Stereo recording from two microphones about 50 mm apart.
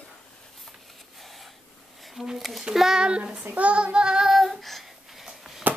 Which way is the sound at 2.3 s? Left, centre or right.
Centre.